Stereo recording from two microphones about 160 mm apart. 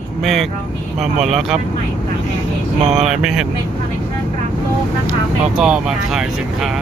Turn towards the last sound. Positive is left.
turn(degrees=-5)  # may be behind; listen again after turning